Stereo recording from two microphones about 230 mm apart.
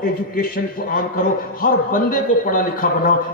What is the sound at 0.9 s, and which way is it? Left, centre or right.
A man's voice, left.